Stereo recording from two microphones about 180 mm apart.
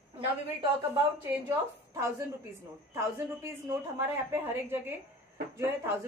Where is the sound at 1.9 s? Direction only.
15° right (ahead or behind).